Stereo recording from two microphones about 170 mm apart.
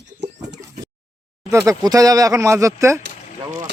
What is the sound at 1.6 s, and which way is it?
Speech, 20° right (ahead or behind).